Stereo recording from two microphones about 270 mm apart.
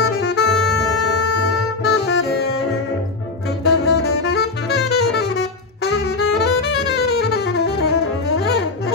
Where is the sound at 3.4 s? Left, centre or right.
Left.